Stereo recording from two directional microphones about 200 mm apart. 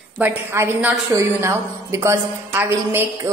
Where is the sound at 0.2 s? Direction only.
10° right (ahead or behind).